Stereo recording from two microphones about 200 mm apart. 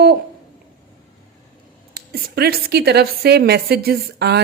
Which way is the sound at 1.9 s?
50° right (ahead or behind).